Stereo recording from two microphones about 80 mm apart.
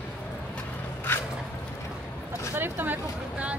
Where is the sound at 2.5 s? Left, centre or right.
Right.